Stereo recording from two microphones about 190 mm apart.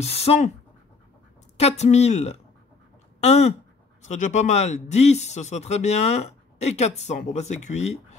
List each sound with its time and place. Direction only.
0.0 s speech: 35° left (ahead or behind)
1.6 s speech: 35° left (ahead or behind)